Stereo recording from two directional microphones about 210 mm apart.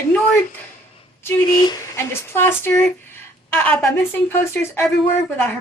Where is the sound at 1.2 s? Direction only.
20° left (ahead or behind).